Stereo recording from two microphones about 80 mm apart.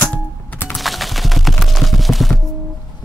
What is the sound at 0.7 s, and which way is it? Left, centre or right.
Clip-clop, centre.